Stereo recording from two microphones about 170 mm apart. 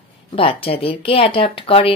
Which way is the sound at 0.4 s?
30° left (ahead or behind).